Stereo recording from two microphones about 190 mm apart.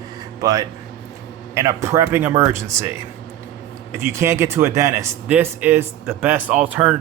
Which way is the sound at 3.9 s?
15° right (ahead or behind).